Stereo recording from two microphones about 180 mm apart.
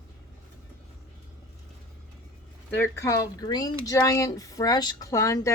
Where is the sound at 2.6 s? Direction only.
10° left (ahead or behind).